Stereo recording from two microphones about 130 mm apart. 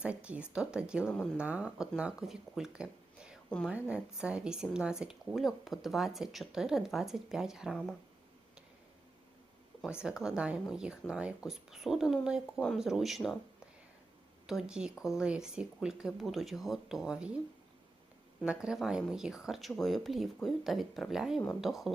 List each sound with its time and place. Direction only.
0.0 s speech: 10° right (ahead or behind)
1.0 s speech: 10° left (ahead or behind)
1.4 s speech: 10° right (ahead or behind)
10.0 s speech: 5° right (ahead or behind)
12.5 s speech: 5° left (ahead or behind)
14.4 s speech: 5° right (ahead or behind)
18.4 s speech: 5° right (ahead or behind)